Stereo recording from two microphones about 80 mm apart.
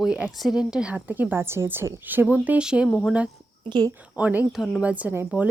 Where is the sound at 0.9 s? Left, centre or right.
Right.